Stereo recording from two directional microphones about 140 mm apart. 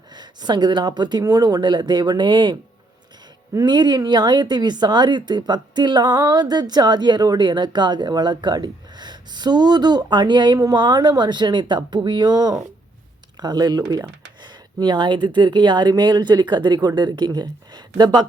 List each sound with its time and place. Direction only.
0.1 s speech: 30° right (ahead or behind)